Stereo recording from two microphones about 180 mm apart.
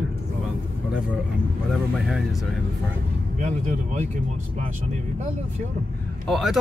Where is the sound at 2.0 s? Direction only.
Centre (ahead or behind).